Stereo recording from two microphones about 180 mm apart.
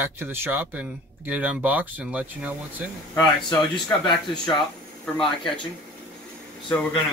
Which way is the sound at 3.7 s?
25° left (ahead or behind).